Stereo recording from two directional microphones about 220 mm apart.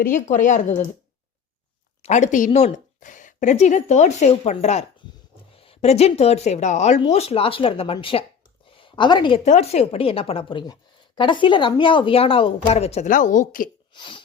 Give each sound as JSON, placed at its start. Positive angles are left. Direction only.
{"t": 0.0, "sound": "a woman's voice", "side_deg": 35}
{"t": 2.0, "sound": "a woman's voice", "side_deg": 30}
{"t": 13.9, "sound": "a sound", "side_deg": 20}